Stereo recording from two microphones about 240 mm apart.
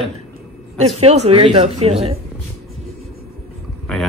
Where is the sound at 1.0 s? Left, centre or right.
Right.